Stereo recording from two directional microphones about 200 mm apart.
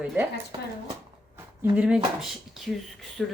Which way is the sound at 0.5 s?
25° right (ahead or behind).